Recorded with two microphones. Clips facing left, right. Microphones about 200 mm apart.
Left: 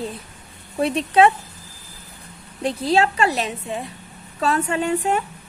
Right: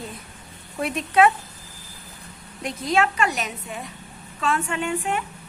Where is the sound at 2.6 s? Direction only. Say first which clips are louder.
Left 4 dB; 30° left (ahead or behind).